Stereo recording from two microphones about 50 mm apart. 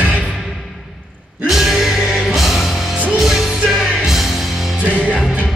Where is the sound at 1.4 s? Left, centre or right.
Centre.